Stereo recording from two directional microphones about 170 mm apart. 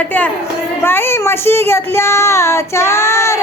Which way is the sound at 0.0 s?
10° left (ahead or behind).